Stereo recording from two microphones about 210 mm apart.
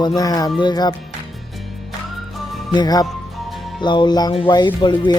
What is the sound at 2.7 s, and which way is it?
Music, 20° left (ahead or behind).